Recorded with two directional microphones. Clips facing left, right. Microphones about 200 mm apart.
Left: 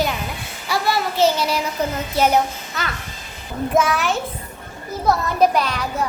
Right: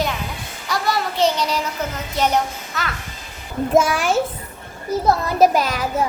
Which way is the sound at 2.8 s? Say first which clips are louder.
Even; centre (ahead or behind).